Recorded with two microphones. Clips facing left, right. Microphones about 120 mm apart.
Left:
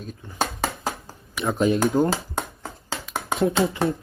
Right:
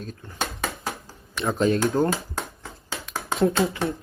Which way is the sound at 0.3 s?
30° left (ahead or behind).